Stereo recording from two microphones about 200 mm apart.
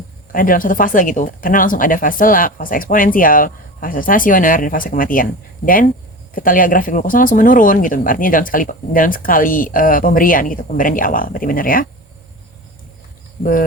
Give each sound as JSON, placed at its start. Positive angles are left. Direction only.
{"t": 0.3, "sound": "speech", "side_deg": 45}
{"t": 13.4, "sound": "speech", "side_deg": 45}